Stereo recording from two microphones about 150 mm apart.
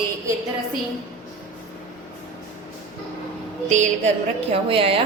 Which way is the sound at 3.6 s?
50° right (ahead or behind).